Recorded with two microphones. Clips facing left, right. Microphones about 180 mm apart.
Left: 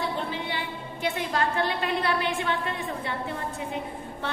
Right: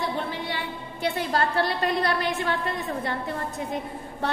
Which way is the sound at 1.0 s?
35° right (ahead or behind).